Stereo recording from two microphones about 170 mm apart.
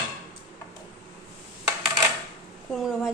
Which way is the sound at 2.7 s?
Centre (ahead or behind).